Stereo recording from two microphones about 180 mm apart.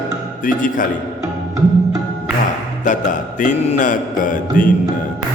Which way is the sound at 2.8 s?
45° left (ahead or behind).